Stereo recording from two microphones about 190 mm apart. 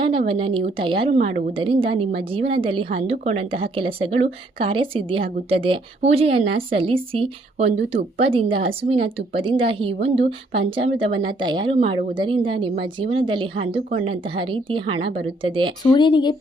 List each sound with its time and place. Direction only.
0.0 s a woman's voice: 30° right (ahead or behind)
15.8 s speech: 25° left (ahead or behind)